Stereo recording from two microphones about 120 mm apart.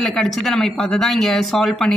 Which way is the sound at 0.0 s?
5° left (ahead or behind).